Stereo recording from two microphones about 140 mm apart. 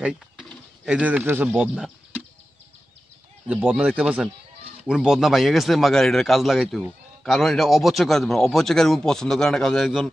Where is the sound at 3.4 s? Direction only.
5° right (ahead or behind).